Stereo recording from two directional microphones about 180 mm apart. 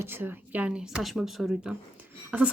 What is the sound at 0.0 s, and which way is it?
A woman's voice, 10° right (ahead or behind).